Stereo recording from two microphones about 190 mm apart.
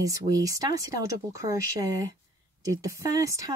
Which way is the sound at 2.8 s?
15° right (ahead or behind).